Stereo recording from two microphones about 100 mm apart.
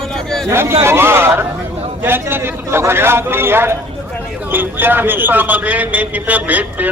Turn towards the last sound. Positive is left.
turn(degrees=-15)  # may be behind; listen again after turning